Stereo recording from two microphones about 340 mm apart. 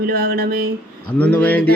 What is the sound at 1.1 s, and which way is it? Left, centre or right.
Speech, centre.